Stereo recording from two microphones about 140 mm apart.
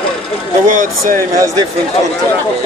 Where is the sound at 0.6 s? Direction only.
65° right (ahead or behind).